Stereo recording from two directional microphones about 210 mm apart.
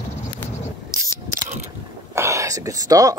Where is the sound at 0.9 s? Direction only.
40° right (ahead or behind).